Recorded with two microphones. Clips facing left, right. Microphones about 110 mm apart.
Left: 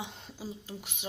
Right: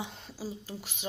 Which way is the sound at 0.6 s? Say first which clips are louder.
Right 1 dB; 15° left (ahead or behind).